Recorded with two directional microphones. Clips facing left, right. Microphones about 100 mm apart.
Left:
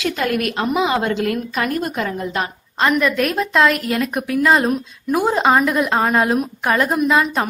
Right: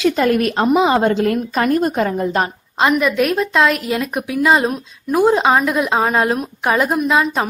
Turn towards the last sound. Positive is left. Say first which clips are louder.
# even
turn(degrees=0)  # may be behind; listen again after turning